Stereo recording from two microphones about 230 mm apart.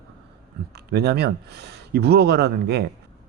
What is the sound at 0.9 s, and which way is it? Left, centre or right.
A man's voice, right.